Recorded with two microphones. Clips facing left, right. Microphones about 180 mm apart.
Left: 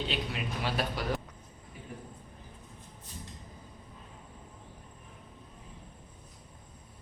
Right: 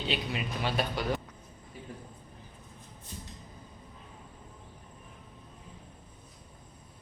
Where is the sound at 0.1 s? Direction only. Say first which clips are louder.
Right 2 dB; centre (ahead or behind).